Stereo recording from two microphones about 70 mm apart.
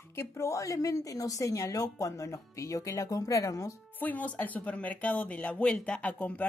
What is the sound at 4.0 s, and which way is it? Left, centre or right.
A woman's voice, left.